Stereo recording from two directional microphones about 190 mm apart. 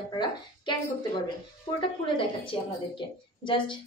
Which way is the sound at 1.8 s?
25° left (ahead or behind).